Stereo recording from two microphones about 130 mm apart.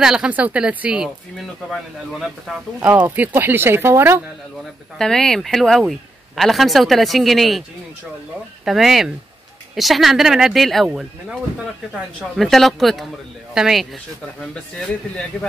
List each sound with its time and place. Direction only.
0.0 s speech: 5° right (ahead or behind)
2.9 s speech: 15° right (ahead or behind)
4.9 s speech: 5° left (ahead or behind)
8.6 s speech: centre (ahead or behind)